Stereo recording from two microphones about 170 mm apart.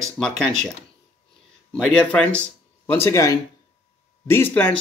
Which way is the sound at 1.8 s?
5° left (ahead or behind).